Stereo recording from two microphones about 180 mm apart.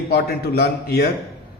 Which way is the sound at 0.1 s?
60° left (ahead or behind).